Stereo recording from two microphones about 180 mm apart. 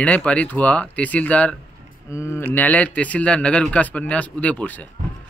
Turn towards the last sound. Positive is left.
turn(degrees=10)  # may be behind; listen again after turning